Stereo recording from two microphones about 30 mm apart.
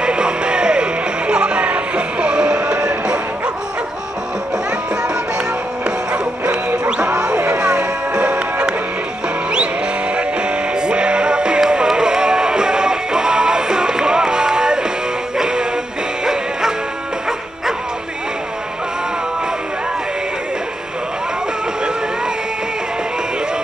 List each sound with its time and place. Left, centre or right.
0.0 s music: right
6.5 s music: right
7.3 s music: right
7.6 s music: right
10.1 s music: right